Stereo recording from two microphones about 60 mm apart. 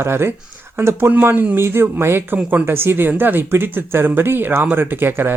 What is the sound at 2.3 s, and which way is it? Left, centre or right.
Speech, right.